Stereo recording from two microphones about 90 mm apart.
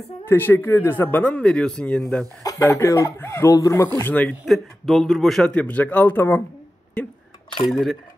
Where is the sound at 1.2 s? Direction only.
10° left (ahead or behind).